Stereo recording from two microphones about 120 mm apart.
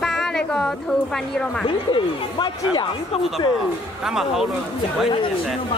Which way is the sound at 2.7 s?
40° left (ahead or behind).